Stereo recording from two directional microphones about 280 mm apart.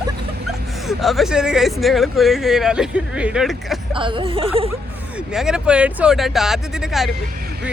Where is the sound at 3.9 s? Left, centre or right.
Centre.